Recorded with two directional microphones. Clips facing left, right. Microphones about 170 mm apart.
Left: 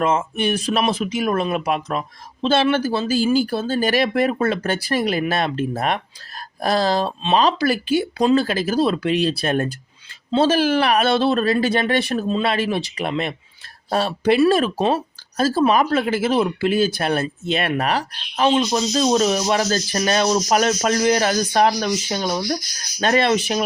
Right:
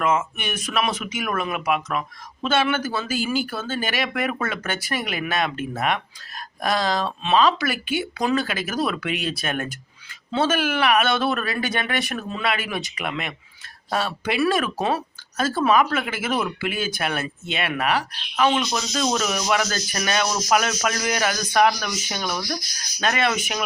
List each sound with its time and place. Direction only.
0.0 s speech: 30° left (ahead or behind)